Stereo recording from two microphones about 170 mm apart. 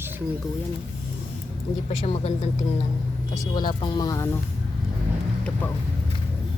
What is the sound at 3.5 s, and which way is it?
Speech, 25° left (ahead or behind).